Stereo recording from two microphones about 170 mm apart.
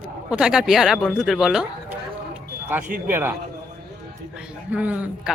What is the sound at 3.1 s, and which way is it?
Speech, 10° right (ahead or behind).